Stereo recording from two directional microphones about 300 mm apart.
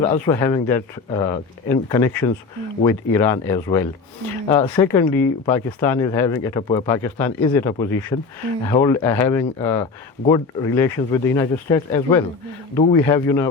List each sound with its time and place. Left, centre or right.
0.0 s speech: centre